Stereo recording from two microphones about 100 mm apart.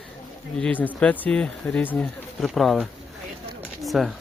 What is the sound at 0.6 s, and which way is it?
Speech, 15° left (ahead or behind).